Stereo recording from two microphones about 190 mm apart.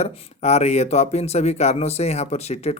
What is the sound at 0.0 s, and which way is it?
Speech, 35° left (ahead or behind).